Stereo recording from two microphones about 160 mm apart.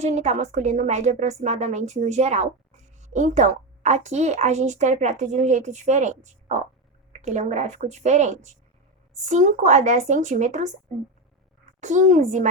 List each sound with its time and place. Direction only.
0.0 s a woman's voice: 45° right (ahead or behind)
11.8 s a woman's voice: 50° right (ahead or behind)